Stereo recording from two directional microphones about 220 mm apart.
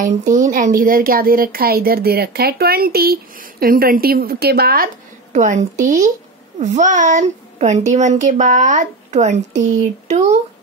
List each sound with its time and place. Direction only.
0.0 s speech: 35° right (ahead or behind)
5.3 s a woman's voice: 35° right (ahead or behind)